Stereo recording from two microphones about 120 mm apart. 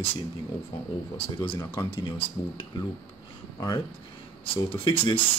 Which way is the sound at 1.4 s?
40° left (ahead or behind).